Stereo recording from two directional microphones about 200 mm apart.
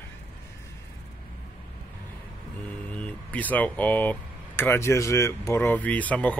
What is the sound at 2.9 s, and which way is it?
Speech, 5° left (ahead or behind).